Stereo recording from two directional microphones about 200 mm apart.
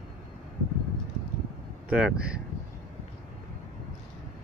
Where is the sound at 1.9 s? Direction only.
5° right (ahead or behind).